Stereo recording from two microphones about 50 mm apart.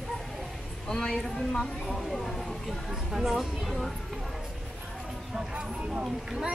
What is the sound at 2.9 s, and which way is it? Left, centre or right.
Speech, centre.